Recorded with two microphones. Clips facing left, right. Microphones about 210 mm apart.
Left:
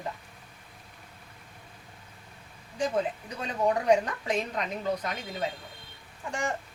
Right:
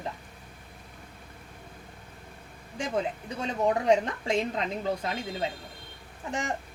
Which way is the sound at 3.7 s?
25° right (ahead or behind).